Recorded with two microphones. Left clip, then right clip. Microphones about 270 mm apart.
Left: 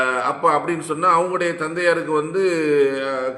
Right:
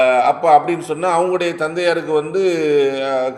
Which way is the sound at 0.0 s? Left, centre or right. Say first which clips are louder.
Right 7 dB; right.